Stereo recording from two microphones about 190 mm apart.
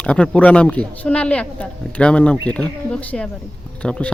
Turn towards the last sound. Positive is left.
turn(degrees=5)  # may be behind; listen again after turning